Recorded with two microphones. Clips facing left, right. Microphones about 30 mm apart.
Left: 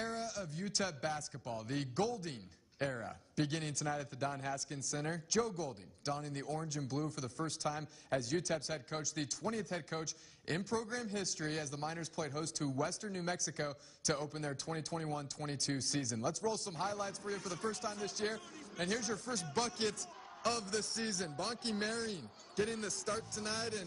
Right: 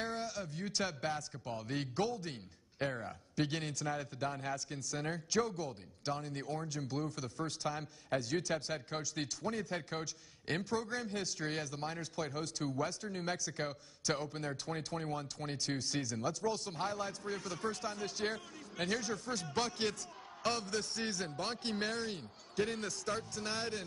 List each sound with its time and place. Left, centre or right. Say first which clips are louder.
0.0 s a man's voice: right 1 dB; right